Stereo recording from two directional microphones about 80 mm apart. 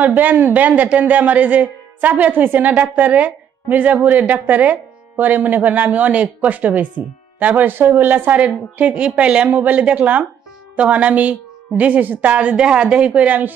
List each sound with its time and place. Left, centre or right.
0.0 s a man's voice: right